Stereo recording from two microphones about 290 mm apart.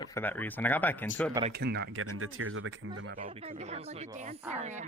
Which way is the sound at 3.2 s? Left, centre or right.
Right.